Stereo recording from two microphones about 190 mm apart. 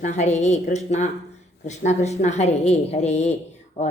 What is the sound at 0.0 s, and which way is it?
Speech, 40° left (ahead or behind).